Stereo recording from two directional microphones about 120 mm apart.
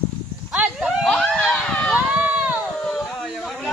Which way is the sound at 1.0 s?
10° left (ahead or behind).